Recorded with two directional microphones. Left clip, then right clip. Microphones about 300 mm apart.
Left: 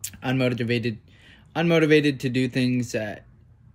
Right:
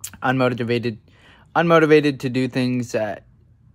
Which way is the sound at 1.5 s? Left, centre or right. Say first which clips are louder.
Right 5 dB; centre.